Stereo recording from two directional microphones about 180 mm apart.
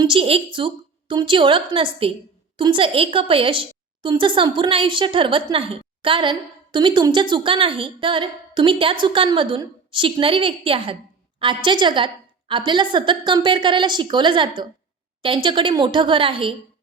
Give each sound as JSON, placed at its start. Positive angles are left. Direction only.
{"t": 0.0, "sound": "a woman's voice", "side_deg": -30}